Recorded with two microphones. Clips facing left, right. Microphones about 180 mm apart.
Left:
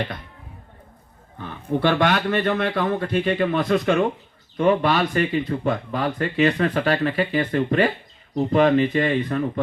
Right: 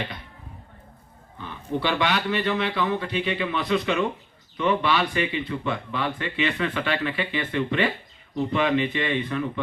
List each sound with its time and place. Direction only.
1.4 s a man's voice: 50° left (ahead or behind)